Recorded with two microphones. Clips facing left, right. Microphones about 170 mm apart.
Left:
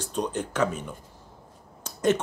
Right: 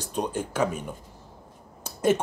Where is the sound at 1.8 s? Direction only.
10° right (ahead or behind).